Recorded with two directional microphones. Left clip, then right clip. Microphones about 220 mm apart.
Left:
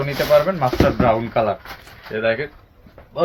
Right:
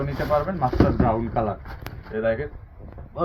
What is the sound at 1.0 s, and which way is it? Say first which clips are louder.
Speech: left 6 dB; 50° left (ahead or behind).